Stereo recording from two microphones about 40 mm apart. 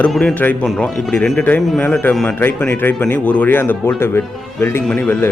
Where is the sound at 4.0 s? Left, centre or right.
Left.